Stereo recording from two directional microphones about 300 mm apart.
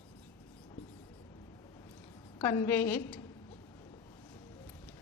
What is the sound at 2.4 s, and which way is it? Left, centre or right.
Speech, centre.